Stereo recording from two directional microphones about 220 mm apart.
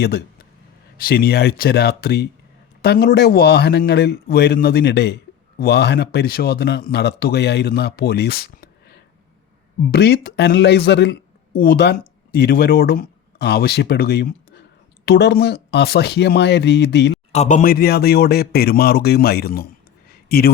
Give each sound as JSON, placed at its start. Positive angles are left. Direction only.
{"t": 0.9, "sound": "a man's voice", "side_deg": 45}
{"t": 17.3, "sound": "speech", "side_deg": 30}